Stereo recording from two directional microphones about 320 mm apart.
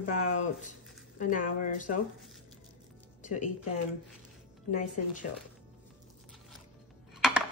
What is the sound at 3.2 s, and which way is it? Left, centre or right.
Music, left.